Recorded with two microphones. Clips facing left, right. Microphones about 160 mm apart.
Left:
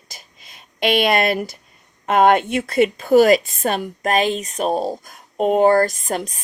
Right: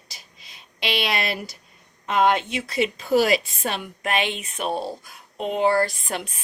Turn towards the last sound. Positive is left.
turn(degrees=40)  # may be behind; listen again after turning